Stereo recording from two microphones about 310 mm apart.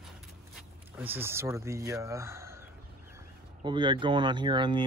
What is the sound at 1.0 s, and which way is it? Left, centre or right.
Speech, centre.